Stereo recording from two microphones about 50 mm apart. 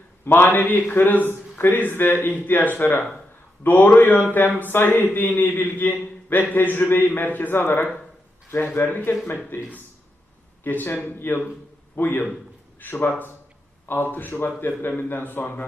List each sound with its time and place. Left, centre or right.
0.3 s speech: left
10.6 s speech: left